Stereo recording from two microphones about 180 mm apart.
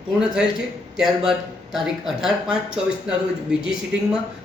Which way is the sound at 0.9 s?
5° right (ahead or behind).